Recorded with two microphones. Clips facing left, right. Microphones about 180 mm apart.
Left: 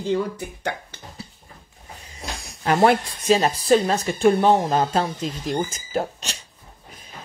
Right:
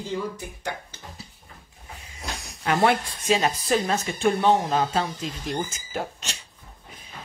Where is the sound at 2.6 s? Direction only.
40° left (ahead or behind).